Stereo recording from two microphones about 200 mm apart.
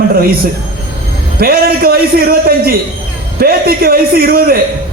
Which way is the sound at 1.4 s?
50° right (ahead or behind).